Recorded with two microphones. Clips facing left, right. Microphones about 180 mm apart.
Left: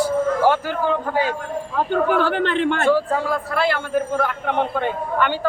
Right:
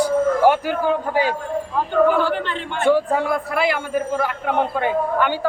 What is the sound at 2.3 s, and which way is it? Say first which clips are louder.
Speech: left 6 dB; 65° left (ahead or behind).